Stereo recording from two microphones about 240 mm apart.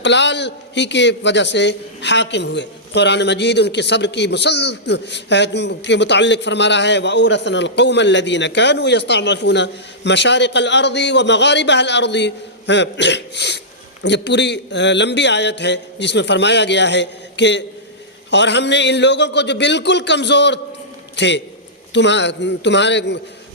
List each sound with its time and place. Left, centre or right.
0.0 s a man's voice: left